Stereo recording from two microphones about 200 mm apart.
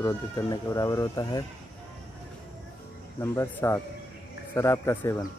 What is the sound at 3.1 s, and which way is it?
Speech, 15° left (ahead or behind).